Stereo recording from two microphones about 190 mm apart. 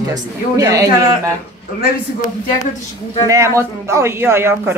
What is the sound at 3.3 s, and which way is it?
A man's voice, 15° right (ahead or behind).